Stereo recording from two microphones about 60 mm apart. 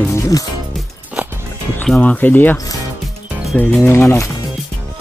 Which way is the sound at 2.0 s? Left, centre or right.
Left.